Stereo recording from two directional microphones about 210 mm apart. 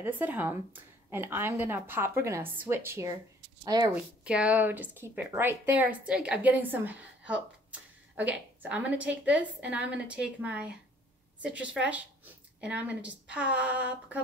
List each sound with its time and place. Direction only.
0.0 s a woman's voice: 10° right (ahead or behind)
4.2 s a woman's voice: 5° right (ahead or behind)